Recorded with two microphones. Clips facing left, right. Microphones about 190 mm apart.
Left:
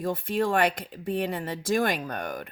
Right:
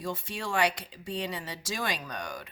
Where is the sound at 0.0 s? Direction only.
55° left (ahead or behind).